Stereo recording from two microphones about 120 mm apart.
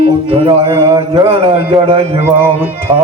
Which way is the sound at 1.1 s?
50° right (ahead or behind).